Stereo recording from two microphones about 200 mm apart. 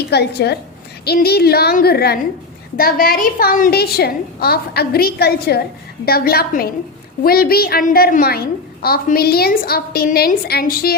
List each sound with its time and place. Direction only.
0.1 s a woman's voice: 55° left (ahead or behind)